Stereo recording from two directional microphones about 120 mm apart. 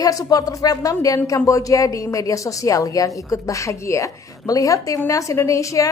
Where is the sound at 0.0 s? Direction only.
30° left (ahead or behind).